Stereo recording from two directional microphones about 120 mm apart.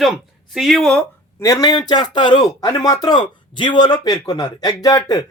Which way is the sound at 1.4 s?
30° left (ahead or behind).